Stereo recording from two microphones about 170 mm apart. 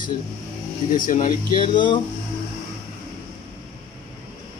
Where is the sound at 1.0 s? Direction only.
50° left (ahead or behind).